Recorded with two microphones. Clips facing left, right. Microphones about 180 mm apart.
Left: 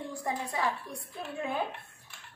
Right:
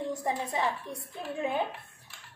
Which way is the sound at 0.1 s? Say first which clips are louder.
Right 3 dB; 20° right (ahead or behind).